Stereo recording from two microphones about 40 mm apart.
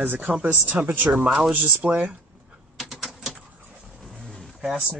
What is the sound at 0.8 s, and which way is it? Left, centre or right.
Speech, right.